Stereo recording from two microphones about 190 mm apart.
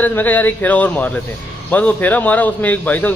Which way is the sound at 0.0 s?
10° left (ahead or behind).